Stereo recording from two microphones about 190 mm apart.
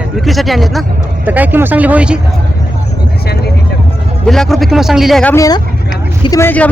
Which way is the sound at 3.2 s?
55° left (ahead or behind).